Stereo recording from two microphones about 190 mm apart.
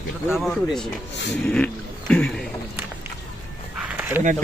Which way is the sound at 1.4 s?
5° left (ahead or behind).